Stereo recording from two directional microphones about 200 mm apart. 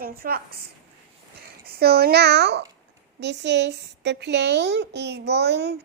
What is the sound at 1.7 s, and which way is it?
A child's voice, 50° right (ahead or behind).